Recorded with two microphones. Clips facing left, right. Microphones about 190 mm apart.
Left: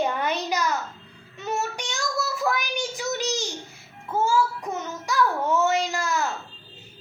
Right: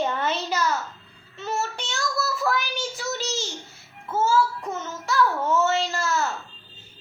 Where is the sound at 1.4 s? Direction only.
15° left (ahead or behind).